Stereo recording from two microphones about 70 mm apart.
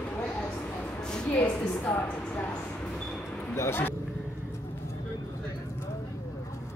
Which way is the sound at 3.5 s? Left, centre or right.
Left.